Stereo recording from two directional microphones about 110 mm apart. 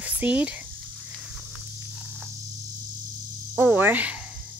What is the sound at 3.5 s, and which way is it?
Cricket, 15° right (ahead or behind).